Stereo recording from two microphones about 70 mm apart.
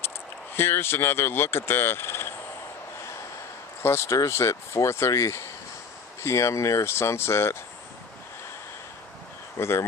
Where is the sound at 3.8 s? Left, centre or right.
Left.